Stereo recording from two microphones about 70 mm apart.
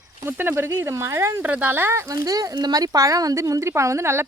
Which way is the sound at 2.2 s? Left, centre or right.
Right.